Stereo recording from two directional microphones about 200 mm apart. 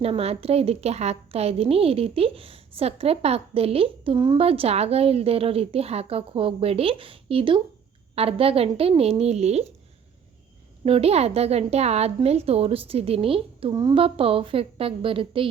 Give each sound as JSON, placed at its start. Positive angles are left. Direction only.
{"t": 0.0, "sound": "a woman's voice", "side_deg": -30}
{"t": 10.8, "sound": "a woman's voice", "side_deg": -30}